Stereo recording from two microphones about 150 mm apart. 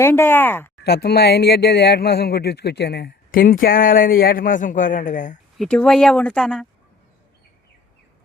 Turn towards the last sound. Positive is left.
turn(degrees=5)  # may be behind; listen again after turning